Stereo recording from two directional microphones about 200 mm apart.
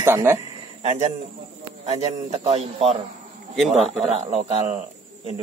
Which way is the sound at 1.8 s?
30° right (ahead or behind).